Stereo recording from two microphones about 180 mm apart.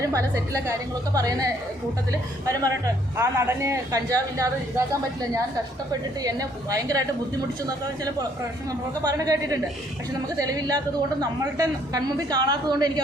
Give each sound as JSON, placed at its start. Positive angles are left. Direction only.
{"t": 0.0, "sound": "a man's voice", "side_deg": -15}
{"t": 2.5, "sound": "a man's voice", "side_deg": -20}
{"t": 6.2, "sound": "a woman's voice", "side_deg": -20}
{"t": 9.0, "sound": "a woman's voice", "side_deg": -20}